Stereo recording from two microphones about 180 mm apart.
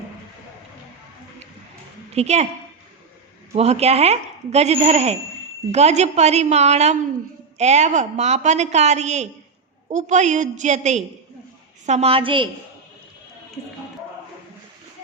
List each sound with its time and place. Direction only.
2.1 s speech: 35° right (ahead or behind)
3.5 s speech: 35° right (ahead or behind)